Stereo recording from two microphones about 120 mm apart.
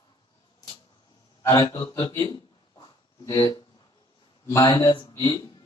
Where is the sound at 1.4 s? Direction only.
20° left (ahead or behind).